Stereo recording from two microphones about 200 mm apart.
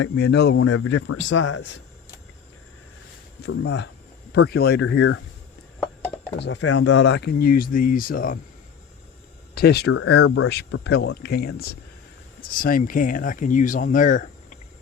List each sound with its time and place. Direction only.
0.0 s speech: 60° left (ahead or behind)
0.6 s speech: 85° left
3.4 s speech: 60° left (ahead or behind); by 5.2 s 75° left (ahead or behind)
6.4 s speech: 65° left (ahead or behind); by 8.4 s 45° left (ahead or behind)
9.6 s speech: 55° left (ahead or behind)
10.2 s speech: 90° left
10.5 s speech: 55° left (ahead or behind); by 14.6 s 40° left (ahead or behind)